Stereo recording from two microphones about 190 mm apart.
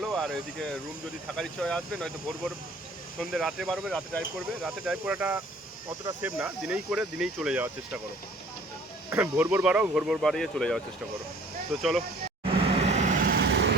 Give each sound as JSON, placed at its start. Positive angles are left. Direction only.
{"t": 0.0, "sound": "speech", "side_deg": 0}
{"t": 9.0, "sound": "speech", "side_deg": -10}
{"t": 12.5, "sound": "vehicle", "side_deg": -30}